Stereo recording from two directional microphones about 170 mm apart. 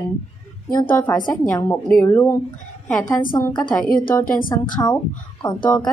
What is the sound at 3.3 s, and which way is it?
Speech, 25° left (ahead or behind).